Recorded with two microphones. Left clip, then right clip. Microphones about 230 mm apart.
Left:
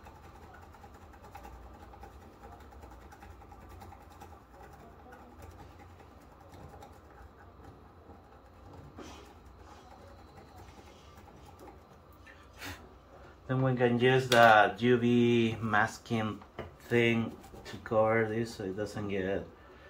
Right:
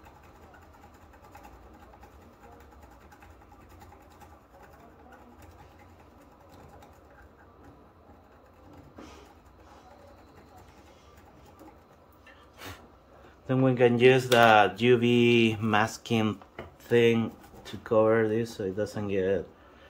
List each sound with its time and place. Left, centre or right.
13.5 s speech: right